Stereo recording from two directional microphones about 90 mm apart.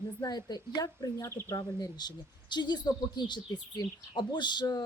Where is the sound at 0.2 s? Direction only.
50° left (ahead or behind).